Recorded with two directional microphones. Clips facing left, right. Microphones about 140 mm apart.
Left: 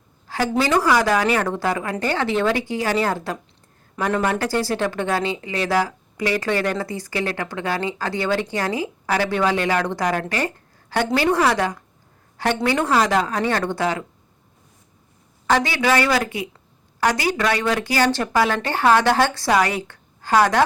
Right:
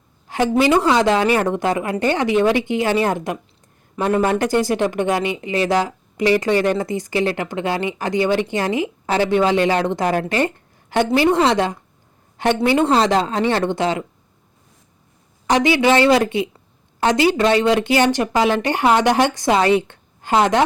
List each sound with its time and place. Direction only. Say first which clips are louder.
0.3 s a sound: right 4 dB; 20° right (ahead or behind)
0.5 s speech: right 3 dB; 20° right (ahead or behind)
15.4 s speech: right 4 dB; 20° right (ahead or behind)